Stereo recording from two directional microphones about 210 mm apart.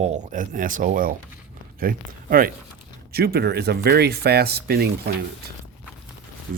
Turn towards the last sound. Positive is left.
turn(degrees=-50)  # may be behind; listen again after turning